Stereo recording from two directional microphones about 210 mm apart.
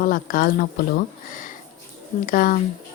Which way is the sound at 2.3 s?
40° left (ahead or behind).